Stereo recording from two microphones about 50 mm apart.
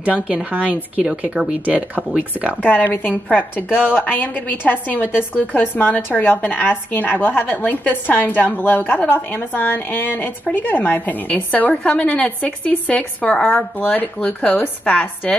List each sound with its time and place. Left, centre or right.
0.0 s speech: right
2.6 s a woman's voice: left
11.7 s speech: left